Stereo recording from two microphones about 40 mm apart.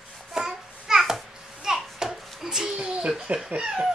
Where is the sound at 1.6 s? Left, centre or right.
Centre.